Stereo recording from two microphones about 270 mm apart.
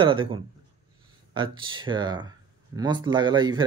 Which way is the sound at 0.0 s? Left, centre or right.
Centre.